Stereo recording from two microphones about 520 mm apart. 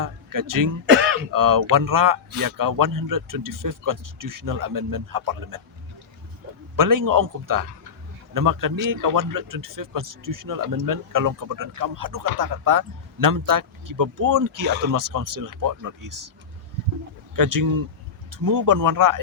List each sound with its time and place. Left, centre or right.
0.0 s speech: right
0.9 s throat clearing: right
1.3 s speech: right
6.7 s speech: right
17.3 s speech: right